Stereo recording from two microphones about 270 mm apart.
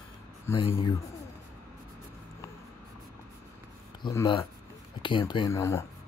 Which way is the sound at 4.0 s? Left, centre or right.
Centre.